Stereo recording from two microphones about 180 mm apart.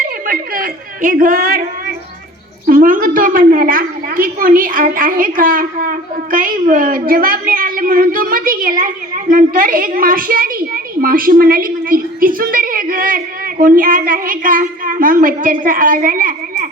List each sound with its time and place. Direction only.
0.0 s a woman's voice: 50° right (ahead or behind)
2.6 s a woman's voice: 50° right (ahead or behind)